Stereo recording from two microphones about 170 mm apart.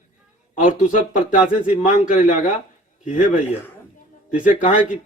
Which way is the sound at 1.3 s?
5° right (ahead or behind).